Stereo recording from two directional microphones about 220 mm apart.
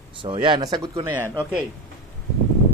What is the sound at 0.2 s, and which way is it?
Speech, 20° right (ahead or behind).